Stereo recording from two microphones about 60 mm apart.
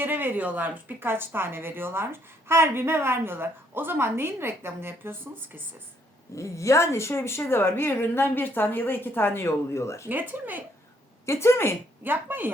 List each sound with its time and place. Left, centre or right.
0.0 s a woman's voice: right
6.3 s a woman's voice: left
10.1 s a woman's voice: right
11.3 s a woman's voice: left
12.0 s a woman's voice: right